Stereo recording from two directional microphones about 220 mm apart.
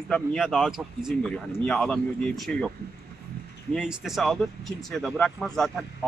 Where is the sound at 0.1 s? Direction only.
Centre (ahead or behind).